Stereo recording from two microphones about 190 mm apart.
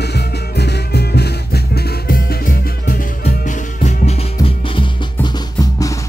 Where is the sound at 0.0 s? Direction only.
60° left (ahead or behind).